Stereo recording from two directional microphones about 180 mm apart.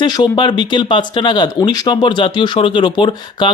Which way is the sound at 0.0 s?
25° left (ahead or behind).